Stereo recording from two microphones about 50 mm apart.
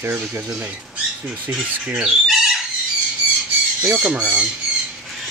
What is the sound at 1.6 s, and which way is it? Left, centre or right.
Speech, right.